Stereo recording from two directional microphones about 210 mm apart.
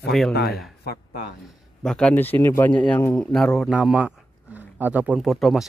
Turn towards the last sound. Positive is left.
turn(degrees=0)  # may be behind; listen again after turning